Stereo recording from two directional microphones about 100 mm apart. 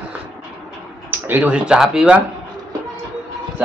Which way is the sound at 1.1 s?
20° right (ahead or behind).